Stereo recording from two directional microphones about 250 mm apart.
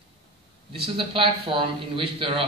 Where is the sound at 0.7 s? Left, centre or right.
Right.